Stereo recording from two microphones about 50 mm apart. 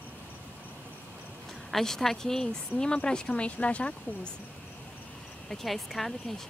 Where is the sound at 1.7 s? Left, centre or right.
Centre; by 4.0 s left.